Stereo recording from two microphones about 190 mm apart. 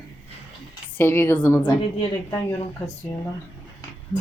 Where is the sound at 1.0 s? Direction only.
10° left (ahead or behind).